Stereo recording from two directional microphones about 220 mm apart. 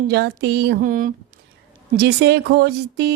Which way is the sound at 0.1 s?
45° right (ahead or behind).